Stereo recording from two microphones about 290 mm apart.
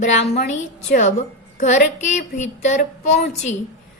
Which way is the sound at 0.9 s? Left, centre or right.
Left.